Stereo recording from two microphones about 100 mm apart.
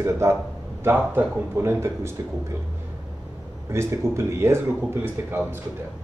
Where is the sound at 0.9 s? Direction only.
15° right (ahead or behind).